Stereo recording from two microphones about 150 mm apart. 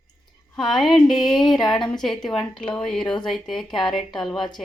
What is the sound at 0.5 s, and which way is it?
Speech, centre (ahead or behind).